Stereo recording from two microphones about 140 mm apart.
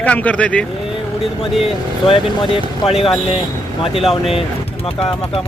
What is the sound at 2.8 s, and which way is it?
Speech, 40° left (ahead or behind).